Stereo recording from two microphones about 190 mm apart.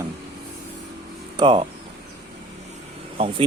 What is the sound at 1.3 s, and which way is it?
Speech, 25° right (ahead or behind).